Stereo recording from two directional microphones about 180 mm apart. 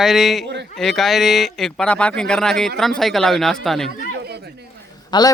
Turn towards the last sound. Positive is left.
turn(degrees=25)  # may be behind; listen again after turning